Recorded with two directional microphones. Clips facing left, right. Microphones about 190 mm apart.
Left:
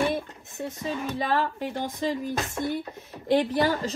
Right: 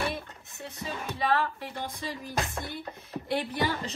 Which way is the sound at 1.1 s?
45° left (ahead or behind).